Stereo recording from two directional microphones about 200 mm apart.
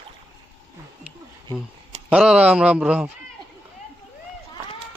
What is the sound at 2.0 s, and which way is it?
A man's voice, 5° right (ahead or behind).